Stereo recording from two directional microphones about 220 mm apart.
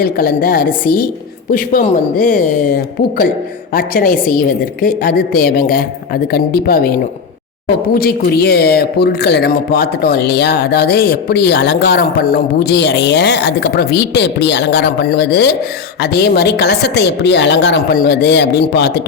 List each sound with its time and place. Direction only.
0.0 s a woman's voice: 45° left (ahead or behind)